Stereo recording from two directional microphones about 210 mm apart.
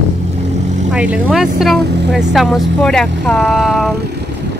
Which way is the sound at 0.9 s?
5° right (ahead or behind).